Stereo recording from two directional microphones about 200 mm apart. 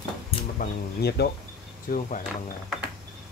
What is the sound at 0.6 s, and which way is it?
Speech, 55° left (ahead or behind).